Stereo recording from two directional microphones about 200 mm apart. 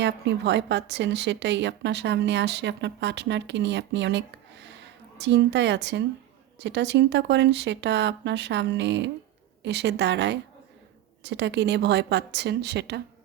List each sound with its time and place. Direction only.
0.0 s a woman's voice: 60° right (ahead or behind)